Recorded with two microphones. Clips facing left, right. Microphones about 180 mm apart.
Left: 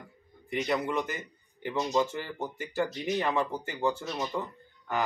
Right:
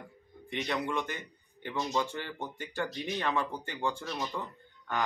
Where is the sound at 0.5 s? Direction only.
5° left (ahead or behind).